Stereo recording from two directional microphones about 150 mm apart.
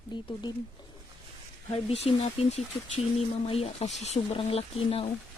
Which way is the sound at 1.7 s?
40° left (ahead or behind).